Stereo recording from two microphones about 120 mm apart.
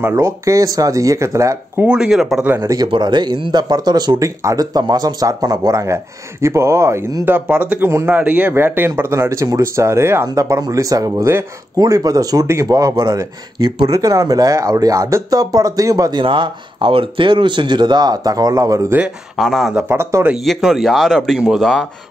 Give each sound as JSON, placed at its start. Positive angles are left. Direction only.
{"t": 0.0, "sound": "speech", "side_deg": -25}
{"t": 1.9, "sound": "speech", "side_deg": -5}
{"t": 2.4, "sound": "speech", "side_deg": -15}
{"t": 2.7, "sound": "speech", "side_deg": -35}
{"t": 7.2, "sound": "speech", "side_deg": -15}
{"t": 16.2, "sound": "speech", "side_deg": -45}
{"t": 18.9, "sound": "speech", "side_deg": -10}
{"t": 19.7, "sound": "speech", "side_deg": -20}
{"t": 20.4, "sound": "speech", "side_deg": 0}